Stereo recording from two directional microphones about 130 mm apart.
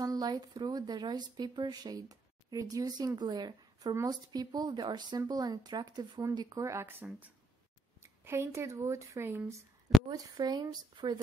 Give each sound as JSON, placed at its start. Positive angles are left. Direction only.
{"t": 0.0, "sound": "speech", "side_deg": -30}
{"t": 10.0, "sound": "speech", "side_deg": -30}